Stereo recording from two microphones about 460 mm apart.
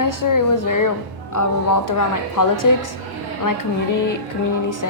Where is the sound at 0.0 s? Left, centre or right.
Left.